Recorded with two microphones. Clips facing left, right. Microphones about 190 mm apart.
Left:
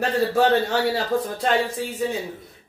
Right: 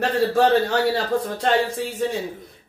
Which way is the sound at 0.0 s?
Centre (ahead or behind).